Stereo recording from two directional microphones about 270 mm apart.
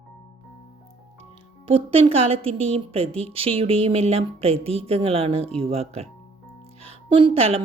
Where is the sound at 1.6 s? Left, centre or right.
Centre.